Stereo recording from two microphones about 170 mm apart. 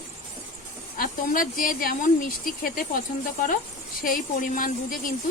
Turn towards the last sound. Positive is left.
turn(degrees=55)  # may be behind; listen again after turning